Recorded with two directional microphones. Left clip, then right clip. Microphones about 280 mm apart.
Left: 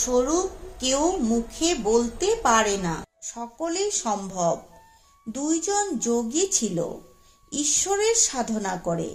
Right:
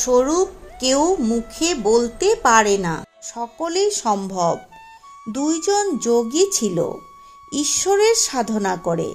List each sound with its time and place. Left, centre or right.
0.0 s a woman's voice: right